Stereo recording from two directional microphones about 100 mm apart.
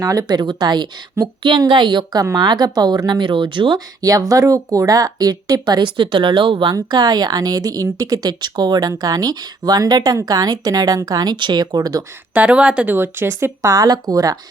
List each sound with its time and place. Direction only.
0.0 s a woman's voice: 35° right (ahead or behind); by 3.8 s 55° right (ahead or behind)
4.0 s a woman's voice: 35° right (ahead or behind)
12.3 s speech: 15° right (ahead or behind); by 14.3 s 40° right (ahead or behind)